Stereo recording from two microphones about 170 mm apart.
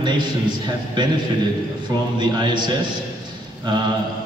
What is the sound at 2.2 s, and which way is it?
Speech, 25° right (ahead or behind).